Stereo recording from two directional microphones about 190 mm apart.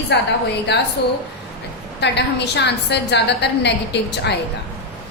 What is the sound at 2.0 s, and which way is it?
A woman's voice, 65° left (ahead or behind).